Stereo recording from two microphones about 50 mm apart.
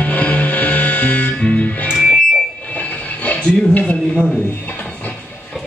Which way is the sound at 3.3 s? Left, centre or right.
Left.